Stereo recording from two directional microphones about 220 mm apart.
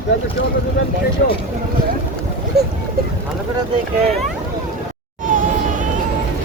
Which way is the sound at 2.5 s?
45° right (ahead or behind).